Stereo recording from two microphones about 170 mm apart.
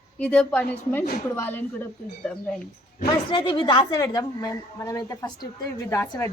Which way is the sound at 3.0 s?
30° left (ahead or behind).